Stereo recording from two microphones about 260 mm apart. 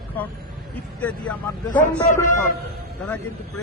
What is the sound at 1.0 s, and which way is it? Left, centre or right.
Speech, centre.